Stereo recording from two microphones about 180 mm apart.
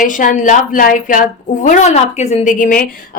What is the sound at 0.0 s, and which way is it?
A woman's voice, 45° left (ahead or behind).